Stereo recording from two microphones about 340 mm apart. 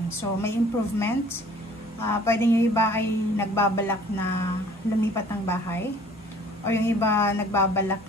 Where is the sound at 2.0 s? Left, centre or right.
Centre.